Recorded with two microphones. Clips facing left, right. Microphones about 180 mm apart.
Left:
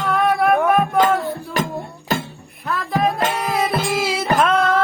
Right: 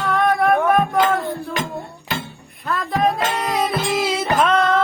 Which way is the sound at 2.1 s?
45° left (ahead or behind).